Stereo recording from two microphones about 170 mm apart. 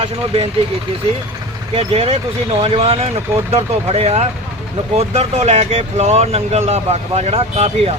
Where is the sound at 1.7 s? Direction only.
35° right (ahead or behind).